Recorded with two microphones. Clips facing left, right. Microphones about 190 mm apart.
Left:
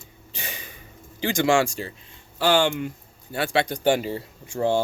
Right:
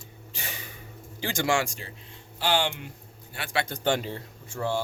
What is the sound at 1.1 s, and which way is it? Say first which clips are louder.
Speech: left 6 dB; 20° left (ahead or behind).